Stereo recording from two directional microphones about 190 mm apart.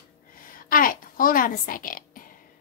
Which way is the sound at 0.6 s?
45° left (ahead or behind).